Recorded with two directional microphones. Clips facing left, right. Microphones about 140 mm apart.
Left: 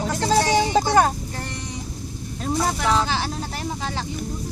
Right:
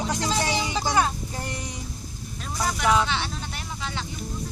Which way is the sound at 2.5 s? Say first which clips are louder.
Left 2 dB; 35° left (ahead or behind).